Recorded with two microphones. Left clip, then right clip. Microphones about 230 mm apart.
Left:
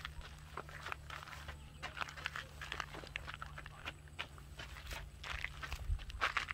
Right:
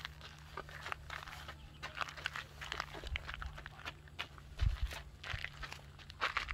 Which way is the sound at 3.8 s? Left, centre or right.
Centre.